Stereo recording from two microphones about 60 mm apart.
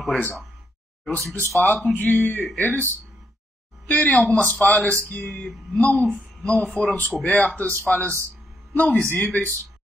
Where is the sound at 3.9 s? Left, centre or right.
Left.